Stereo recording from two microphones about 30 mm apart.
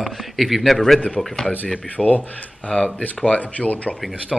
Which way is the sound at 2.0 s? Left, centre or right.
Left.